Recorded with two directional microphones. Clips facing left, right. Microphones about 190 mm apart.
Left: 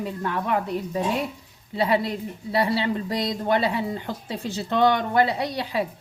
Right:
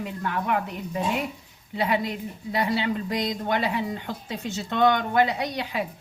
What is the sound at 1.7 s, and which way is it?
A woman's voice, 35° left (ahead or behind).